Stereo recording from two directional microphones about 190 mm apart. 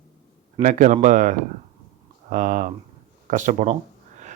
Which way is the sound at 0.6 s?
45° right (ahead or behind).